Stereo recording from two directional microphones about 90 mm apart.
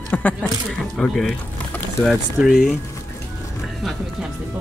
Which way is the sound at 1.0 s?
Centre (ahead or behind).